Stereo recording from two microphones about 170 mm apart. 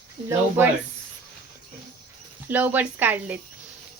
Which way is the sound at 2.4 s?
10° right (ahead or behind).